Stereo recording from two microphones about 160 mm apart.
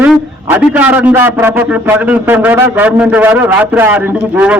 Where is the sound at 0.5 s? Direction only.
10° right (ahead or behind).